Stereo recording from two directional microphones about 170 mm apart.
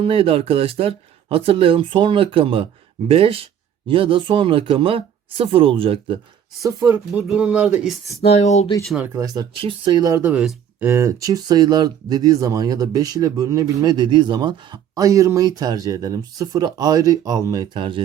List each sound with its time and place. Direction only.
0.0 s speech: 35° right (ahead or behind)
6.6 s speech: 20° right (ahead or behind)
7.1 s speech: 5° right (ahead or behind)
8.2 s speech: 40° left (ahead or behind)
9.0 s speech: 20° right (ahead or behind)